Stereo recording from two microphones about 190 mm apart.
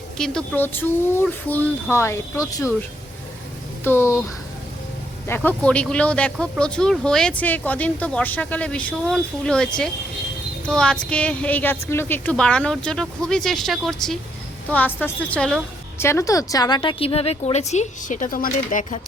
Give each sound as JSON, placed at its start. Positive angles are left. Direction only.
{"t": 0.2, "sound": "speech", "side_deg": 5}
{"t": 3.8, "sound": "speech", "side_deg": 15}
{"t": 5.3, "sound": "a woman's voice", "side_deg": 10}
{"t": 16.0, "sound": "a woman's voice", "side_deg": 15}